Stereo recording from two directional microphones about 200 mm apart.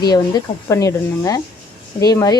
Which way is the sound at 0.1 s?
20° left (ahead or behind).